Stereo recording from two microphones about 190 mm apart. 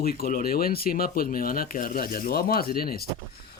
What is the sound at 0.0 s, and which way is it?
Speech, 50° left (ahead or behind).